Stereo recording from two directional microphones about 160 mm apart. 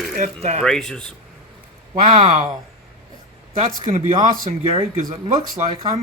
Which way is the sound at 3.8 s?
40° right (ahead or behind).